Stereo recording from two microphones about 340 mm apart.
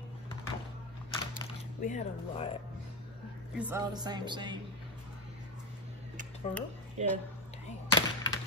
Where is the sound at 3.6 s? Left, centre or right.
Centre.